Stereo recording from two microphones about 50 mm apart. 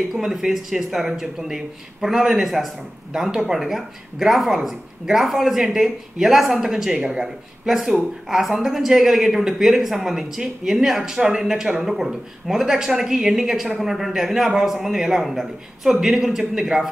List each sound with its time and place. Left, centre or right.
0.1 s a man's voice: centre